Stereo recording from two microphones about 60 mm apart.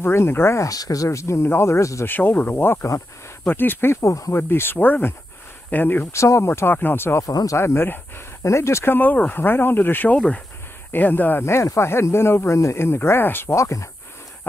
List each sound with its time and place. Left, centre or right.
0.0 s speech: left
0.6 s speech: left
2.0 s speech: left
4.0 s speech: left
4.3 s speech: left
6.1 s speech: left
6.7 s speech: left
7.2 s speech: left
7.5 s speech: left
8.4 s speech: left
8.9 s speech: left
11.4 s speech: left
13.6 s speech: left